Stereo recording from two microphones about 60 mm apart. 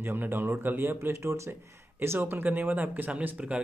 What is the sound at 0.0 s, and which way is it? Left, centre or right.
Speech, right.